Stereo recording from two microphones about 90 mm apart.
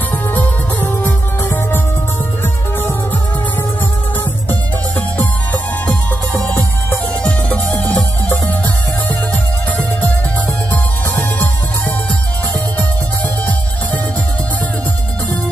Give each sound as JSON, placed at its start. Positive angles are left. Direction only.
{"t": 0.1, "sound": "music", "side_deg": 20}
{"t": 4.2, "sound": "music", "side_deg": 20}